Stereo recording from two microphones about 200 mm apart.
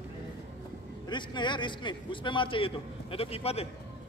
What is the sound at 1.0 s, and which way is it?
A man's voice, 25° left (ahead or behind).